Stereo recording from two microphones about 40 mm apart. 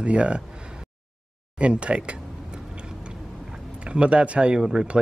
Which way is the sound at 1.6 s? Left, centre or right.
Right.